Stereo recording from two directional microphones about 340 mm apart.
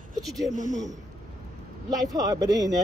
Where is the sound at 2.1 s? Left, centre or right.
Centre.